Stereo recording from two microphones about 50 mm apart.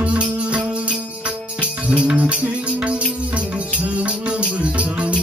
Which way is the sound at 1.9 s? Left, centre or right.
Right.